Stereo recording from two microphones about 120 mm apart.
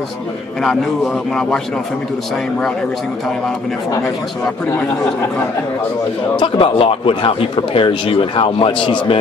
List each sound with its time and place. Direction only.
0.7 s speech: 5° left (ahead or behind)
6.4 s speech: 50° left (ahead or behind)